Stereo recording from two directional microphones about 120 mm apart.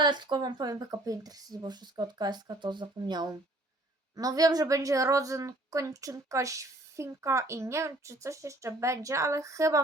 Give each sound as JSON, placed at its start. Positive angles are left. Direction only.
{"t": 0.0, "sound": "a woman's voice", "side_deg": -40}